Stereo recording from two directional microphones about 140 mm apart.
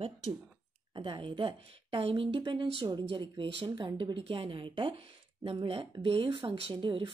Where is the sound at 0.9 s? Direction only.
35° right (ahead or behind).